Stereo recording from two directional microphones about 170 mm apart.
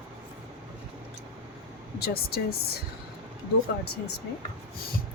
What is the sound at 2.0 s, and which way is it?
Speech, 65° left (ahead or behind).